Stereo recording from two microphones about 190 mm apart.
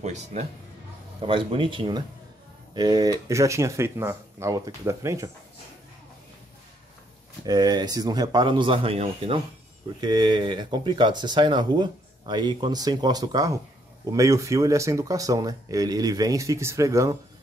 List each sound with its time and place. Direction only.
0.0 s speech: 35° right (ahead or behind); by 5.3 s 15° right (ahead or behind)
7.4 s speech: 20° right (ahead or behind)